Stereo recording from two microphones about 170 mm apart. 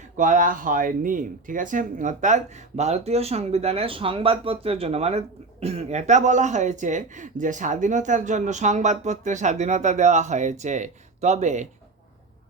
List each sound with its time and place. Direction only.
0.2 s speech: 50° right (ahead or behind)